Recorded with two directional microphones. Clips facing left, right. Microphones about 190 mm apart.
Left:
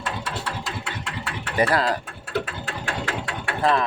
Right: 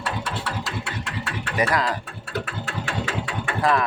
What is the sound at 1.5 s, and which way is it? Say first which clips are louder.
Speech: left 2 dB; 30° left (ahead or behind).